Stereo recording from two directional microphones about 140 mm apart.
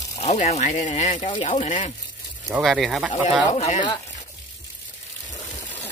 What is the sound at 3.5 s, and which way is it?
Speech, 50° left (ahead or behind).